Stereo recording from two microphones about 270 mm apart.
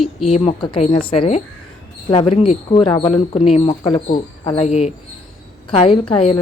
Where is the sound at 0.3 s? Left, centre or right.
Left.